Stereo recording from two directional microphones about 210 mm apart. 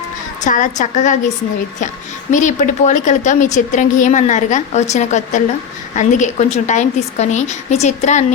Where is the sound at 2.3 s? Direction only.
35° left (ahead or behind).